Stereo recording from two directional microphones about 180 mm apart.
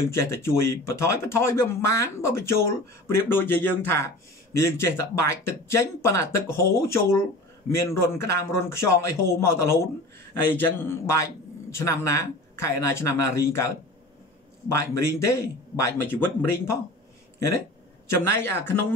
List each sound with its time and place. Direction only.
0.1 s speech: 15° left (ahead or behind)
14.7 s speech: 15° left (ahead or behind)
18.0 s a man's voice: 15° left (ahead or behind)